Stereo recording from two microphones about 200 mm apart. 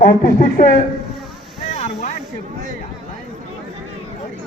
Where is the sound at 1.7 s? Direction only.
35° left (ahead or behind).